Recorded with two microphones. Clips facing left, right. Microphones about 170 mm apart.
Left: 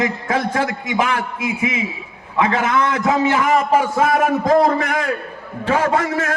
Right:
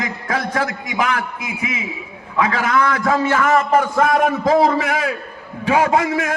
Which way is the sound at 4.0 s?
5° left (ahead or behind).